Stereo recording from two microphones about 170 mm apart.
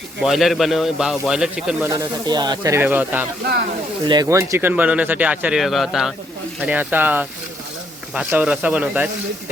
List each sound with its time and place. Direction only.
0.2 s speech: centre (ahead or behind)
1.9 s speech: 20° right (ahead or behind)
4.0 s speech: 25° right (ahead or behind); by 9.0 s 5° right (ahead or behind)